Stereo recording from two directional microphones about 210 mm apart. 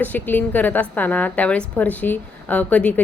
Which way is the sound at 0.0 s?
10° left (ahead or behind).